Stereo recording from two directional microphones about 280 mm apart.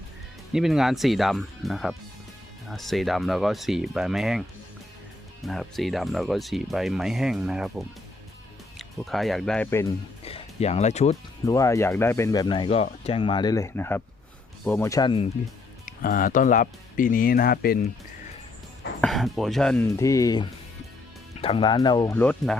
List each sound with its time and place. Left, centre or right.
0.5 s speech: centre
10.2 s speech: left
11.4 s speech: centre
15.9 s speech: left
19.0 s speech: centre